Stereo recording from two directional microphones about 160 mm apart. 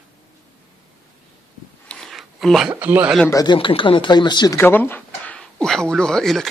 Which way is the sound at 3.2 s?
20° left (ahead or behind).